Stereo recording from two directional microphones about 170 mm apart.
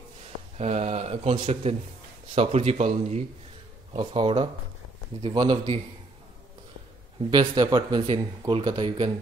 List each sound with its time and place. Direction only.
0.6 s speech: 40° right (ahead or behind)
7.2 s speech: 25° right (ahead or behind)